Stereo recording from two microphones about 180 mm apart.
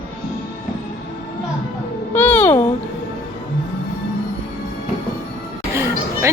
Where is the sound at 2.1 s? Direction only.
10° left (ahead or behind).